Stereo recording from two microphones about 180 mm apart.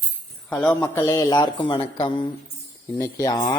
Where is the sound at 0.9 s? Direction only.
20° left (ahead or behind).